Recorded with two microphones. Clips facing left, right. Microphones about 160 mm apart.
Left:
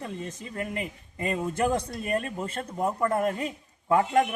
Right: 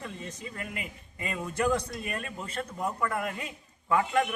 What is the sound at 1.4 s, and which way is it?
A man's voice, 25° left (ahead or behind).